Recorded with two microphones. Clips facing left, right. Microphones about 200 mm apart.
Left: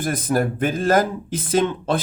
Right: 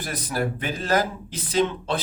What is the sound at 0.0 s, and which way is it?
Speech, 50° left (ahead or behind).